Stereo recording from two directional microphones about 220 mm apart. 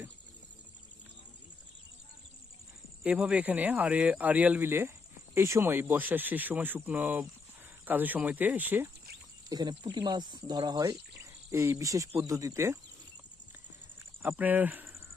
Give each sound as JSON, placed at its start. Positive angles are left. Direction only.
{"t": 3.0, "sound": "speech", "side_deg": -5}
{"t": 9.5, "sound": "speech", "side_deg": -20}
{"t": 14.2, "sound": "speech", "side_deg": -10}